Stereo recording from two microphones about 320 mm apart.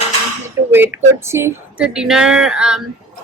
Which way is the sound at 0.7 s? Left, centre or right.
Centre.